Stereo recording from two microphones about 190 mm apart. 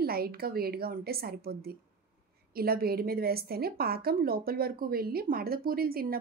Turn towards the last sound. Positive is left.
turn(degrees=-50)  # may be behind; listen again after turning